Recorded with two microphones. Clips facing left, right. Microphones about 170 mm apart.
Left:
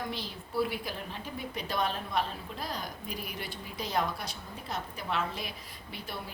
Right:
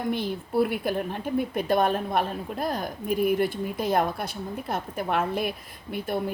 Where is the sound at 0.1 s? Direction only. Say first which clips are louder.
Right 10 dB; 55° right (ahead or behind).